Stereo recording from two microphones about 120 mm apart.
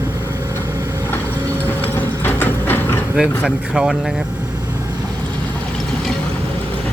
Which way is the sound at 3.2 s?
5° right (ahead or behind).